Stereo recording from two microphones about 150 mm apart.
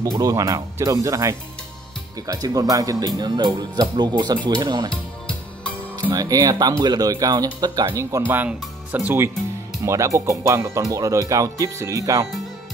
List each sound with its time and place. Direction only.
0.0 s speech: 25° right (ahead or behind)
5.2 s music: 10° left (ahead or behind)
6.0 s speech: 25° right (ahead or behind)